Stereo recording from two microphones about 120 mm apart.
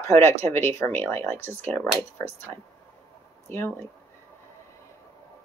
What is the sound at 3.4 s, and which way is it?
Speech, 20° left (ahead or behind).